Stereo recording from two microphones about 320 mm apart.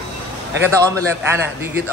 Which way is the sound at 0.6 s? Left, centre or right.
Centre.